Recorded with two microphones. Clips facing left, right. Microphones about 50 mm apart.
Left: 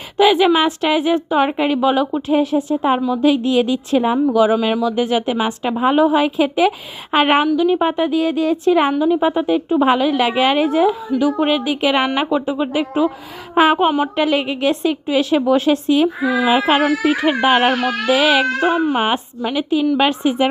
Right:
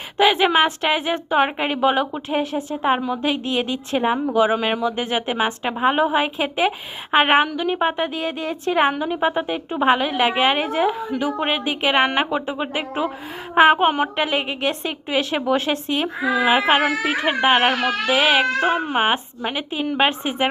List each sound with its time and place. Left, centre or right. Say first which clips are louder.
0.2 s speech: left 3 dB; right